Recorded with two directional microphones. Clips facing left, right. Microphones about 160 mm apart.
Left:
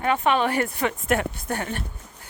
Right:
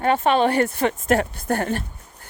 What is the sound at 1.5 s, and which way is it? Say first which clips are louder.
Speech: right 6 dB; 45° right (ahead or behind).